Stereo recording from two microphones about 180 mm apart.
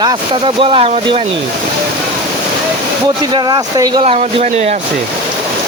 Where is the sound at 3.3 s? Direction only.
25° right (ahead or behind).